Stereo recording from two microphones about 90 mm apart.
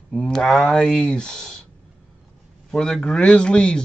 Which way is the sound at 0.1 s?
5° left (ahead or behind).